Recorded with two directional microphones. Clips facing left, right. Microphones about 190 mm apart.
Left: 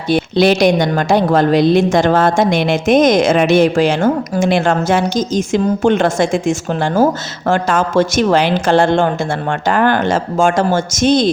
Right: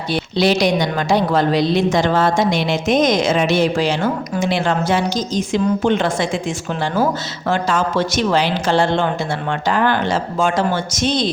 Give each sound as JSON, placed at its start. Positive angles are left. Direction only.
{"t": 0.1, "sound": "a woman's voice", "side_deg": 50}